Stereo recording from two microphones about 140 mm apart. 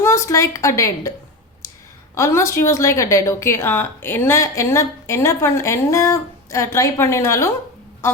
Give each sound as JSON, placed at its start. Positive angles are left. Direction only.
{"t": 0.0, "sound": "a woman's voice", "side_deg": 20}
{"t": 2.1, "sound": "a woman's voice", "side_deg": 20}